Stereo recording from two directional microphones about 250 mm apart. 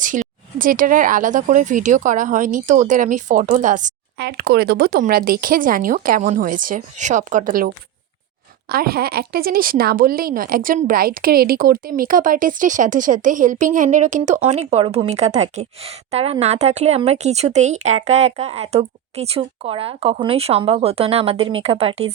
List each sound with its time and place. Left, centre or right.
0.0 s speech: right
8.7 s a woman's voice: right